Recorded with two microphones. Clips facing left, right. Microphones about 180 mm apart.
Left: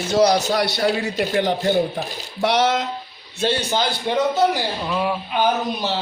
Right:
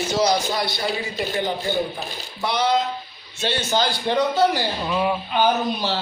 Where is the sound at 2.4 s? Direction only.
90° left.